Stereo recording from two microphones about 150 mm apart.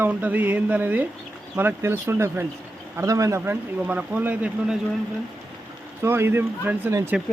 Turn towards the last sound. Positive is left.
turn(degrees=-15)  # may be behind; listen again after turning